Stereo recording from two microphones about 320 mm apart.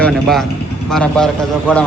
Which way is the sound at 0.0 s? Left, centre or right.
Centre.